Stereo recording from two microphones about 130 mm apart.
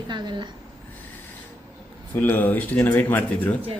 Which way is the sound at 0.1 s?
35° right (ahead or behind).